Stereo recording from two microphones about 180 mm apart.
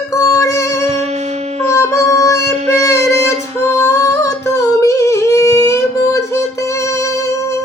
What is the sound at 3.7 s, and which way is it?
Humming, 15° left (ahead or behind).